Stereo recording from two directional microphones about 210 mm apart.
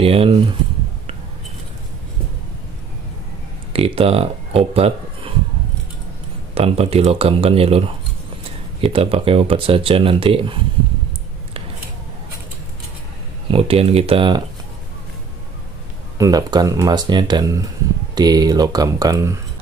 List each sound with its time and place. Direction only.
0.0 s speech: 25° right (ahead or behind)
3.7 s speech: 25° right (ahead or behind)
6.5 s speech: 30° right (ahead or behind)
8.8 s speech: 25° right (ahead or behind)
13.5 s speech: 25° right (ahead or behind)
16.2 s speech: 15° right (ahead or behind)